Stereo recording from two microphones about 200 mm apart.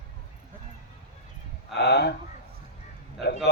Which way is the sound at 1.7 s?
55° left (ahead or behind).